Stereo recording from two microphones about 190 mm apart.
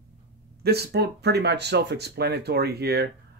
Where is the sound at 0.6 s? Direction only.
60° right (ahead or behind).